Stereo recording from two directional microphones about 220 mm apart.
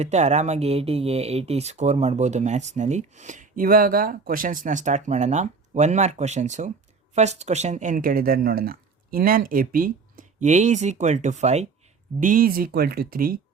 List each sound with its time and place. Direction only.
0.0 s speech: 30° right (ahead or behind)